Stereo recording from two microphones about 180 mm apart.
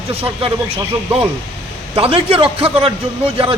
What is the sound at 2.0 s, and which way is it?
A man's voice, 30° right (ahead or behind).